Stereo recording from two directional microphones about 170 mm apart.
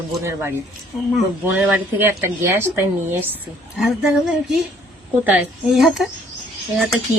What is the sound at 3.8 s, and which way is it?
A woman's voice, centre (ahead or behind).